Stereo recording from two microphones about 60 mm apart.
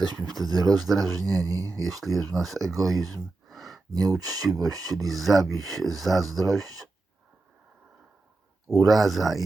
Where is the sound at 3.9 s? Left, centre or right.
Right.